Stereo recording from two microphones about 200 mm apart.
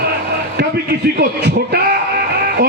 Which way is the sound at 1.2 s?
55° right (ahead or behind).